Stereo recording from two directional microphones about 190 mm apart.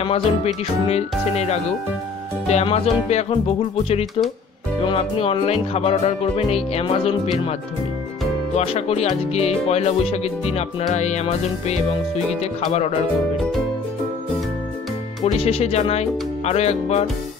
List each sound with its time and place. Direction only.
0.0 s speech: 30° left (ahead or behind)
8.5 s speech: 35° left (ahead or behind)
15.3 s speech: 30° left (ahead or behind)